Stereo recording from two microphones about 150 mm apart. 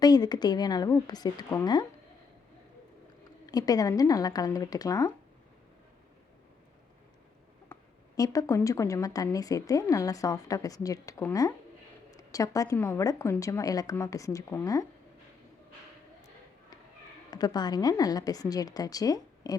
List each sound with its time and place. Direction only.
0.0 s a woman's voice: 25° left (ahead or behind)
3.4 s a woman's voice: 25° left (ahead or behind)
8.1 s a woman's voice: 25° left (ahead or behind)
17.3 s a woman's voice: 25° left (ahead or behind)